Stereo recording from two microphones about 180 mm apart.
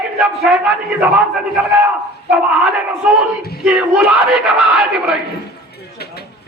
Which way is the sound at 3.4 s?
60° left (ahead or behind).